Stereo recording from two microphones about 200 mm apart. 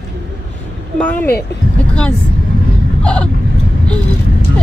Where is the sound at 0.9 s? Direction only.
5° left (ahead or behind).